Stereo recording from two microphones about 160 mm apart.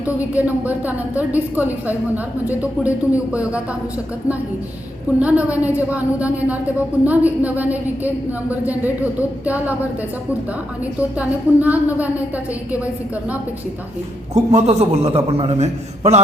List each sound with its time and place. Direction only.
0.0 s a woman's voice: 10° right (ahead or behind)
5.2 s a woman's voice: 10° right (ahead or behind)
11.2 s a woman's voice: 10° right (ahead or behind)
14.3 s a man's voice: 40° right (ahead or behind)